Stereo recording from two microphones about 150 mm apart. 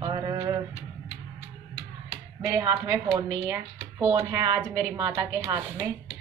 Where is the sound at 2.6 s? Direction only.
20° right (ahead or behind).